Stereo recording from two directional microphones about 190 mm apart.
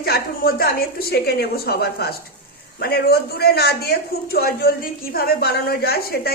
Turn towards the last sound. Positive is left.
turn(degrees=55)  # may be behind; listen again after turning